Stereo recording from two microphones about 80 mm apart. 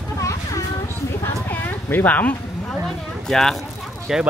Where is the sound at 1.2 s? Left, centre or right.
Left.